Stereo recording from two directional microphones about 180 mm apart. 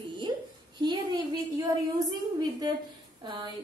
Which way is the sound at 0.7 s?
25° right (ahead or behind).